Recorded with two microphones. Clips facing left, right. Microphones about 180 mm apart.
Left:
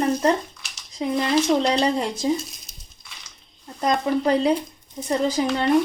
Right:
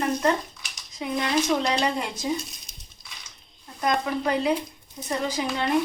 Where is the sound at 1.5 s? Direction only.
15° left (ahead or behind).